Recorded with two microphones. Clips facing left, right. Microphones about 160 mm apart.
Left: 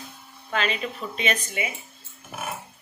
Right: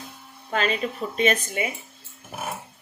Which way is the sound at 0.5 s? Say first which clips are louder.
Right 3 dB; 40° right (ahead or behind).